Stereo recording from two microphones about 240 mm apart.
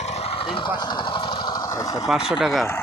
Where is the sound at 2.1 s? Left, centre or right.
Centre.